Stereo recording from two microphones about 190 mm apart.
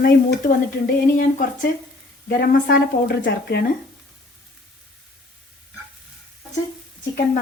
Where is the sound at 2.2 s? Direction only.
50° left (ahead or behind).